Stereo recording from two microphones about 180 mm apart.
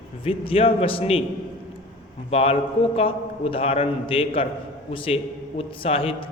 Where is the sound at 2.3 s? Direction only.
35° left (ahead or behind).